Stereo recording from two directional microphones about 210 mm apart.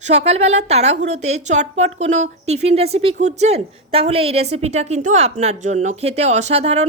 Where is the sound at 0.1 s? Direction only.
30° right (ahead or behind).